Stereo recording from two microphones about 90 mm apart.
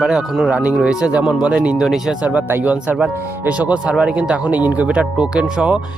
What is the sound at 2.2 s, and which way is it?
Speech, 20° right (ahead or behind).